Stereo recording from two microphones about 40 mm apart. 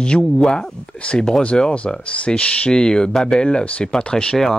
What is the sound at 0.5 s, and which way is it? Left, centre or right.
Speech, centre.